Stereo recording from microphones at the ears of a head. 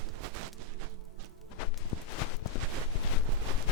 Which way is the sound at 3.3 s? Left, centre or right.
Right.